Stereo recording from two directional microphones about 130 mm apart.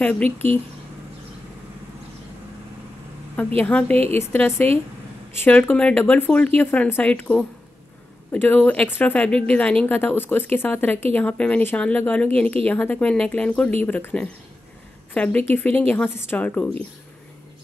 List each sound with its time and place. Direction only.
0.0 s a woman's voice: 10° left (ahead or behind)
3.5 s a woman's voice: 10° left (ahead or behind)